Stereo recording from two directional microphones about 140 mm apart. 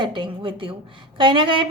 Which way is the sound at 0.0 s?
35° right (ahead or behind).